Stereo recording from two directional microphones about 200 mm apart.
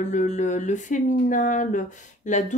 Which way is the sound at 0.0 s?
35° left (ahead or behind).